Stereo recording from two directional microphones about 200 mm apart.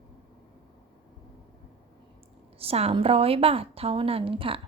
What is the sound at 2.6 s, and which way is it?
A woman's voice, 30° right (ahead or behind).